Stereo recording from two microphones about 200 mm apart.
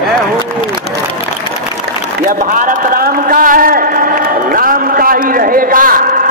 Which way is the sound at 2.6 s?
45° right (ahead or behind).